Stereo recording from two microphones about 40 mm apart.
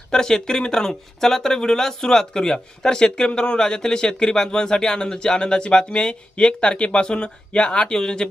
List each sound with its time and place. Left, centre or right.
0.1 s speech: centre